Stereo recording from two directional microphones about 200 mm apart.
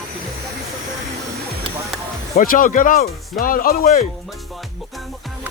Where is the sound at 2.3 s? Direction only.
45° left (ahead or behind).